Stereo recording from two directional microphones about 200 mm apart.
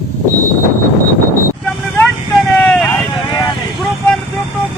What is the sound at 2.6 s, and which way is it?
Vehicle, 5° left (ahead or behind).